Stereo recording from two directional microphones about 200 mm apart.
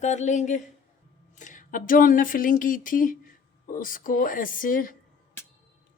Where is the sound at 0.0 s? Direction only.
35° left (ahead or behind).